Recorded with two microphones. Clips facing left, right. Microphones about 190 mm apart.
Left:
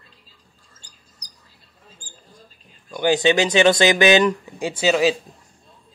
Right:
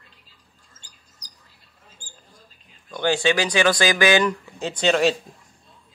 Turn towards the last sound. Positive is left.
turn(degrees=5)  # may be behind; listen again after turning